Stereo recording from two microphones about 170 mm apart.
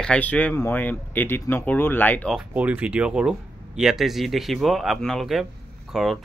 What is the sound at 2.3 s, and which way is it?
Speech, 10° right (ahead or behind).